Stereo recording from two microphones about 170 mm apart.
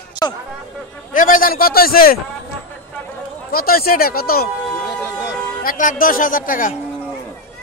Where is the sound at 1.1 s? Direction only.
55° left (ahead or behind).